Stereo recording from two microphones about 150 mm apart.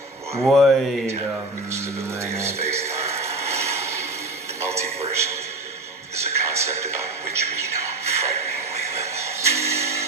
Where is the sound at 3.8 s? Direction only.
20° right (ahead or behind).